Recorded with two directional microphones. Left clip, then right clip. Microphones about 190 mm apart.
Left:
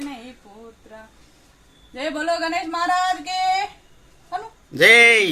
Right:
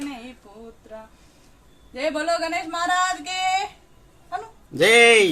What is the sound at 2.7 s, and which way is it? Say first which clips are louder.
Speech: left 1 dB; 30° right (ahead or behind).